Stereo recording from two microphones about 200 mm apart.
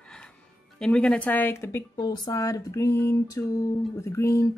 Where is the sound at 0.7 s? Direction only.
5° left (ahead or behind).